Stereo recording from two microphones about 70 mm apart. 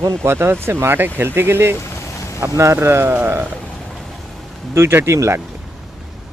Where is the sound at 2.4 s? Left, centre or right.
Right.